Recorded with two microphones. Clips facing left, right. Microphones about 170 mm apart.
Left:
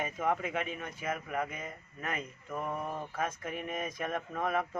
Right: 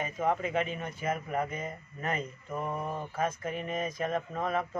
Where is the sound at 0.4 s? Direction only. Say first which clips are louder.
Right 4 dB; 30° right (ahead or behind).